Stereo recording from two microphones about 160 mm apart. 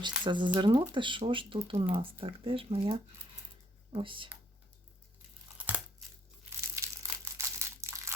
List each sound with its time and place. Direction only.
0.3 s speech: 30° right (ahead or behind)
5.5 s tearing: 10° right (ahead or behind)
6.7 s crushing: 15° right (ahead or behind)